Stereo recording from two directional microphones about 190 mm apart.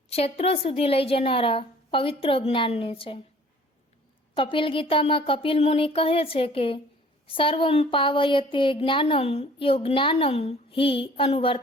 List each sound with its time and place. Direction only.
0.1 s a woman's voice: 30° left (ahead or behind)
4.4 s a woman's voice: 25° left (ahead or behind)